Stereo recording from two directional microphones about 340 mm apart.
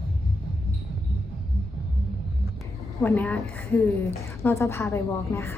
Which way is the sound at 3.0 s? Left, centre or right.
Centre.